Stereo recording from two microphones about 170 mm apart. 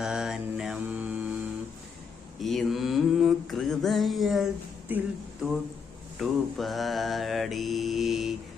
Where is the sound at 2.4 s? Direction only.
Centre (ahead or behind).